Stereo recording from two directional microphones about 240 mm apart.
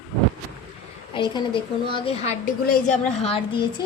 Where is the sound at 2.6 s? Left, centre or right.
Left.